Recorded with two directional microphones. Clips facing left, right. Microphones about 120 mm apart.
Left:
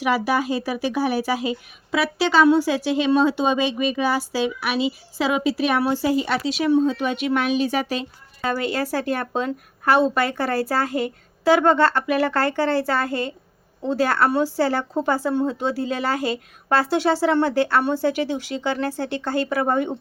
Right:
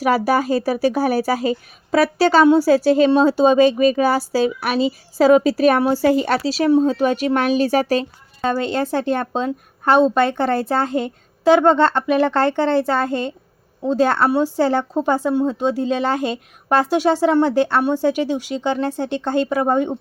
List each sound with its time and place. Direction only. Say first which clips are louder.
0.0 s a woman's voice: right 4 dB; 40° right (ahead or behind)
8.4 s a woman's voice: right 4 dB; 25° right (ahead or behind)